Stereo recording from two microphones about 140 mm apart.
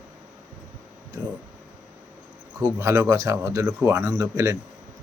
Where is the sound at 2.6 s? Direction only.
20° right (ahead or behind).